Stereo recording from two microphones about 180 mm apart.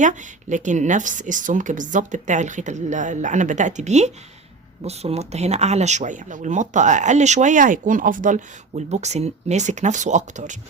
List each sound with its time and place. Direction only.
0.0 s speech: 45° right (ahead or behind)